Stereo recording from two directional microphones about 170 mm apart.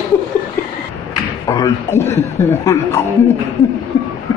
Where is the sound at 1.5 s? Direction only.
20° left (ahead or behind).